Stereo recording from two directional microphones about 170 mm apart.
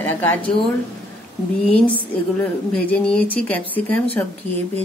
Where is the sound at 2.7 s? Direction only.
5° left (ahead or behind).